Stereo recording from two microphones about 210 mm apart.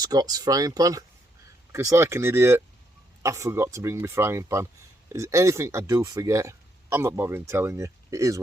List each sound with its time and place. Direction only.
0.0 s speech: 20° right (ahead or behind)